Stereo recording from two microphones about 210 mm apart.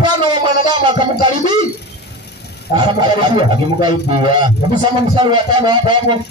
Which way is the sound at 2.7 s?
20° right (ahead or behind).